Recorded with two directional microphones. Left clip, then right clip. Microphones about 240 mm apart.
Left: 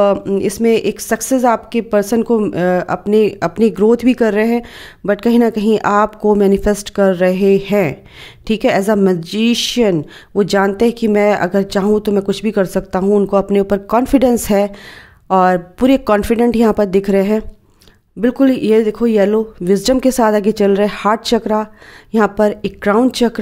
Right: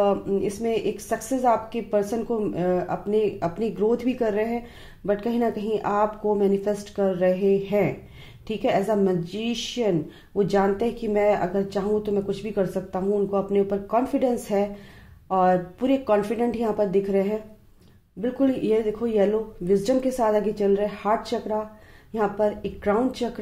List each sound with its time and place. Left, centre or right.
0.0 s a woman's voice: left